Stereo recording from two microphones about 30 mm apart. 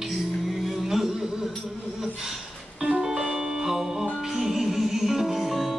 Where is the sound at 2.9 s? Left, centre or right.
Centre.